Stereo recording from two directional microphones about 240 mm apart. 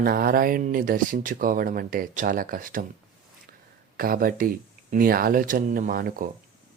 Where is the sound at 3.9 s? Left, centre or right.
Right.